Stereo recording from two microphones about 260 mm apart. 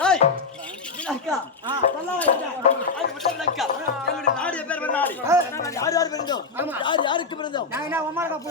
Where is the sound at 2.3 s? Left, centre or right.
Left.